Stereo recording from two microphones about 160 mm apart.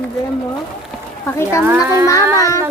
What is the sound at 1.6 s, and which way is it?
Speech, 15° right (ahead or behind).